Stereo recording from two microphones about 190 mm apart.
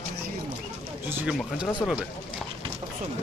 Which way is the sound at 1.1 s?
10° right (ahead or behind).